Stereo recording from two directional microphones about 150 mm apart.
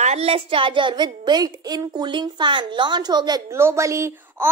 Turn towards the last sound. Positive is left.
turn(degrees=-20)  # may be behind; listen again after turning